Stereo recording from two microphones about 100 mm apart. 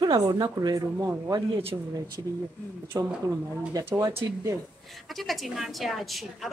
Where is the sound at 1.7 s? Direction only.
20° right (ahead or behind).